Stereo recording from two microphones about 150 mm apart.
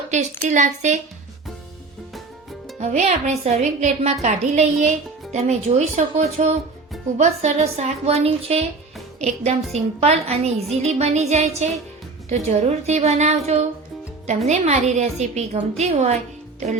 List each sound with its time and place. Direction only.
0.1 s a woman's voice: 55° right (ahead or behind)
2.7 s a woman's voice: 50° right (ahead or behind)